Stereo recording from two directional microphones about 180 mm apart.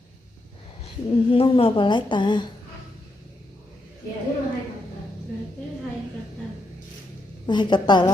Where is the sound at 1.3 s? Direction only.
30° left (ahead or behind).